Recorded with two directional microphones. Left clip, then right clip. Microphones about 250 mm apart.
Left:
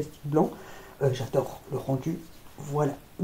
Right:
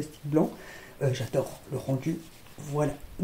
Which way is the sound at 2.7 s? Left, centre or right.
Right.